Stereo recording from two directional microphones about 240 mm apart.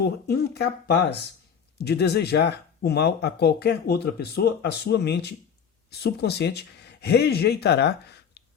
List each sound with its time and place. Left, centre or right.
0.0 s speech: left